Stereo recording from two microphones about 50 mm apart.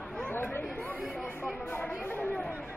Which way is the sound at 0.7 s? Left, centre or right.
Left.